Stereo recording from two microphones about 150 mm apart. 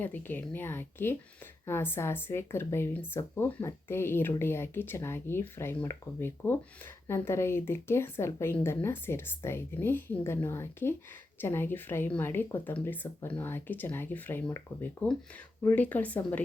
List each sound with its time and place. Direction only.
0.0 s a woman's voice: 10° left (ahead or behind)